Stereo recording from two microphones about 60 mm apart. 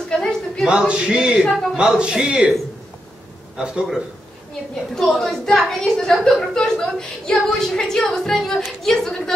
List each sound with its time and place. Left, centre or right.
0.2 s a sound: centre
0.7 s speech: centre
1.4 s speech: centre
2.0 s speech: centre
3.5 s a man's voice: centre
4.9 s a woman's voice: centre